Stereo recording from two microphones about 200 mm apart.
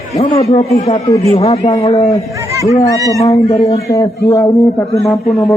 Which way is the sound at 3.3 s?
35° left (ahead or behind).